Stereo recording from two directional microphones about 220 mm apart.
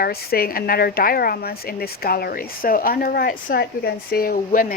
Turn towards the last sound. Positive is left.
turn(degrees=40)  # may be behind; listen again after turning